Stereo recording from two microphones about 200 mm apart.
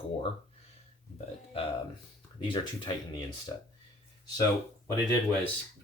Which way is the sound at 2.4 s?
25° left (ahead or behind).